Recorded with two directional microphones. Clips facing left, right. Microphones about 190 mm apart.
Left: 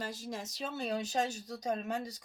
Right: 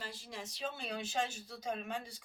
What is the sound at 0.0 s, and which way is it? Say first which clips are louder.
Speech: left 6 dB; 45° left (ahead or behind).